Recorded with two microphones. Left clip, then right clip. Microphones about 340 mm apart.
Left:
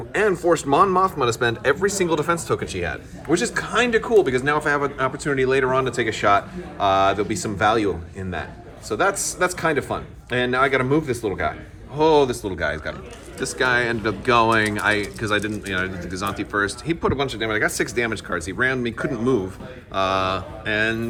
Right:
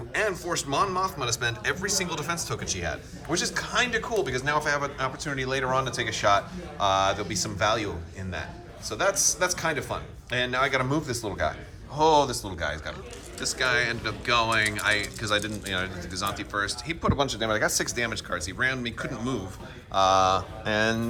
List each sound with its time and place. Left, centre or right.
0.1 s a man's voice: centre